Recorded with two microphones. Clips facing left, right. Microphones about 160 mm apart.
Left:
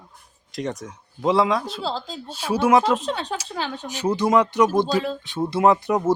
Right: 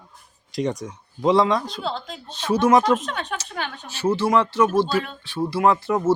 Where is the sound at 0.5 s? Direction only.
Centre (ahead or behind).